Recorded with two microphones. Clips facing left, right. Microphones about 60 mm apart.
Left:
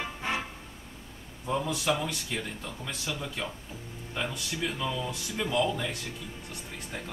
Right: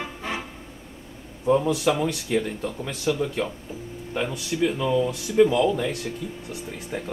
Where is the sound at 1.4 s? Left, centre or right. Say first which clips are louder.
Right 10 dB; right.